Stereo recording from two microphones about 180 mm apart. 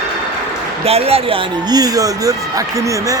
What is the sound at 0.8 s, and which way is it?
Speech, 35° right (ahead or behind).